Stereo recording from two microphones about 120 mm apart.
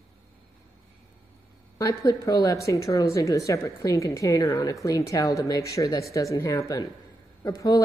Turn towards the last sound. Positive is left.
turn(degrees=30)  # may be behind; listen again after turning